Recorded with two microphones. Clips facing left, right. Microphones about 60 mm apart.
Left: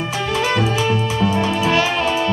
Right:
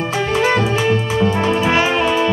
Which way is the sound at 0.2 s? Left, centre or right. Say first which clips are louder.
Right 3 dB; right.